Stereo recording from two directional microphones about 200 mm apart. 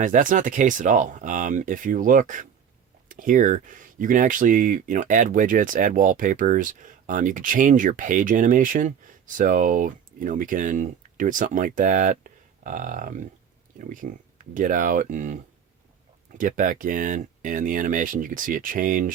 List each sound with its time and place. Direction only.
0.0 s speech: 40° right (ahead or behind)
16.4 s speech: 40° right (ahead or behind)